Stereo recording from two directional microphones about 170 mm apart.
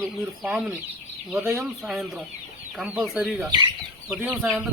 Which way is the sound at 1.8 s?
Centre (ahead or behind).